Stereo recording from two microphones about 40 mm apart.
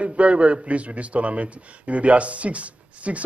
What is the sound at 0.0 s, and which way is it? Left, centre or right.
A man's voice, right.